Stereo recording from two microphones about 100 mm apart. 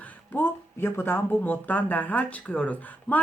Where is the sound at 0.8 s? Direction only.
25° left (ahead or behind).